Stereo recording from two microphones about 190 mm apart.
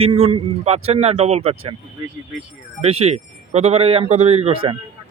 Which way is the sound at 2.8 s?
30° right (ahead or behind).